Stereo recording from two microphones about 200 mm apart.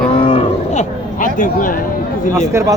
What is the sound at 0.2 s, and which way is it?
Cattle, 25° left (ahead or behind).